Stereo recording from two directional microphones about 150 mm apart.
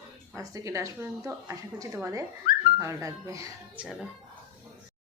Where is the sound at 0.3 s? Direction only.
20° right (ahead or behind).